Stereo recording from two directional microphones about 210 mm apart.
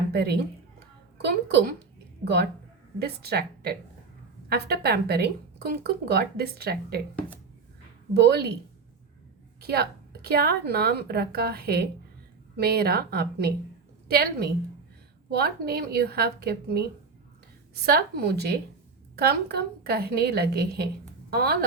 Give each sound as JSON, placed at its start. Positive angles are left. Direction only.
{"t": 0.1, "sound": "a woman's voice", "side_deg": -50}
{"t": 8.1, "sound": "a woman's voice", "side_deg": -50}
{"t": 9.6, "sound": "a woman's voice", "side_deg": -50}
{"t": 17.8, "sound": "a woman's voice", "side_deg": -50}